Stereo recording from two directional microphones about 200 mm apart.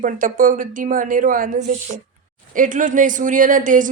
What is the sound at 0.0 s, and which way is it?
A woman's voice, 45° right (ahead or behind).